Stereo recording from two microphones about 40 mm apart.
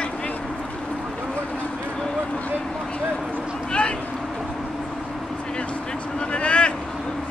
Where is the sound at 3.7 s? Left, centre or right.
Left.